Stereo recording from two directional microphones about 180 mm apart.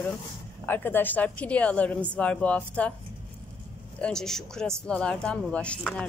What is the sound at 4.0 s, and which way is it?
Speech, 5° left (ahead or behind).